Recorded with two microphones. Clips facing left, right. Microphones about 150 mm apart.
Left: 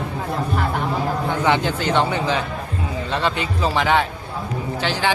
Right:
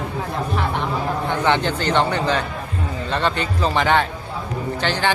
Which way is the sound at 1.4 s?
5° left (ahead or behind).